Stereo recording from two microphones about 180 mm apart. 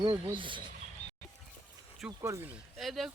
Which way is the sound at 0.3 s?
30° right (ahead or behind).